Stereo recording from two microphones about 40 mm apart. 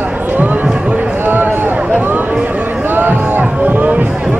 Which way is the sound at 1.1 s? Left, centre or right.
Right.